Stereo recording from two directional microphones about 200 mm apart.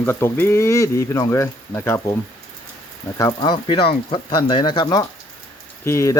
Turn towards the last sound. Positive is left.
turn(degrees=15)  # may be behind; listen again after turning